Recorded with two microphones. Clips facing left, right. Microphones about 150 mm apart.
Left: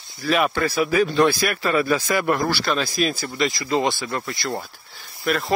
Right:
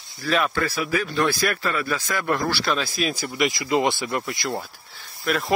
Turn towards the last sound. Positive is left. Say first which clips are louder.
# left 2 dB
turn(degrees=0)  # may be behind; listen again after turning